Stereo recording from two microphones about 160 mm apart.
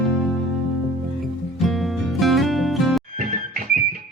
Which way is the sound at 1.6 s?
Centre (ahead or behind).